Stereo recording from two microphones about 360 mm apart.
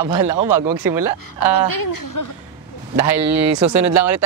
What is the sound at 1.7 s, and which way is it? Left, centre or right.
Speech, left.